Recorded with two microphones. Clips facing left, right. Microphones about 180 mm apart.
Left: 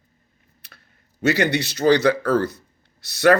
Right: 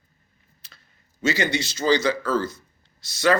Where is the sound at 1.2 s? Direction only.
60° left (ahead or behind).